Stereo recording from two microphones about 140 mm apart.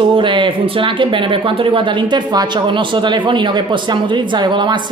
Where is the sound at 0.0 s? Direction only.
35° right (ahead or behind).